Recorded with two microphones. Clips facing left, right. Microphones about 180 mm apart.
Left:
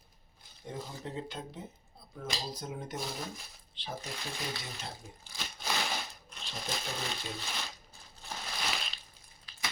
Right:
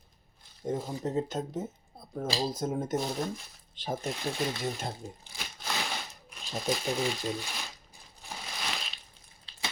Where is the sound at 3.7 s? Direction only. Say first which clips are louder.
Right 8 dB; 45° right (ahead or behind).